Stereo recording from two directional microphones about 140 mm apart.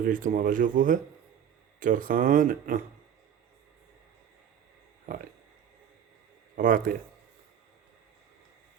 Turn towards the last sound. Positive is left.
turn(degrees=-80)